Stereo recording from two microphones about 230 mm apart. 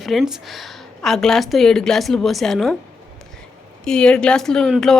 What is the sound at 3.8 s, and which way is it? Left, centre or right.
A woman's voice, centre.